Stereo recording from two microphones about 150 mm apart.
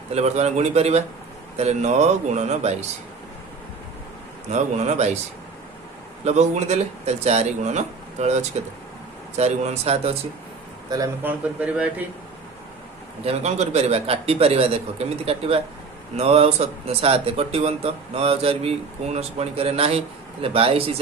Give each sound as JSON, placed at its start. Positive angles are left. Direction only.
{"t": 0.1, "sound": "speech", "side_deg": -45}
{"t": 4.4, "sound": "speech", "side_deg": -50}
{"t": 6.2, "sound": "speech", "side_deg": -50}
{"t": 10.8, "sound": "speech", "side_deg": -25}
{"t": 11.2, "sound": "speech", "side_deg": -10}
{"t": 13.2, "sound": "speech", "side_deg": -45}